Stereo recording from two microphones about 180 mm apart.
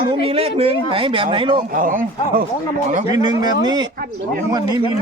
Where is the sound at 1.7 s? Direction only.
50° right (ahead or behind).